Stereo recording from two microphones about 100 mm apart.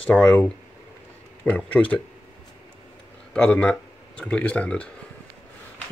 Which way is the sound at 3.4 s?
10° left (ahead or behind).